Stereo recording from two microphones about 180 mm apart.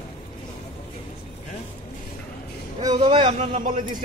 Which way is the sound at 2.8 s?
25° right (ahead or behind).